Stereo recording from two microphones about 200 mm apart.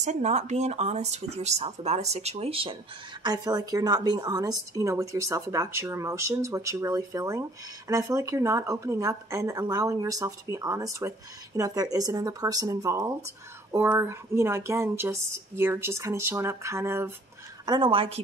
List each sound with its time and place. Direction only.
0.0 s a woman's voice: 35° right (ahead or behind); by 17.1 s 10° right (ahead or behind)
17.6 s a woman's voice: 25° right (ahead or behind)